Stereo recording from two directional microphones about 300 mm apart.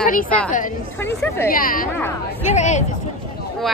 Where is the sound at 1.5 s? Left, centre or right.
Left.